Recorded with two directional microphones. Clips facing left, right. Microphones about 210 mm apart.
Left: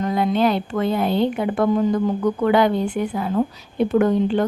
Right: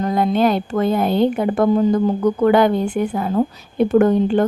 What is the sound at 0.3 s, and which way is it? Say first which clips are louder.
A woman's voice: right 2 dB; 45° right (ahead or behind).